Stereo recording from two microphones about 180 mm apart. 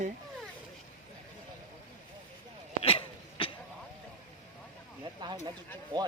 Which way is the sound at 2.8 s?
30° left (ahead or behind).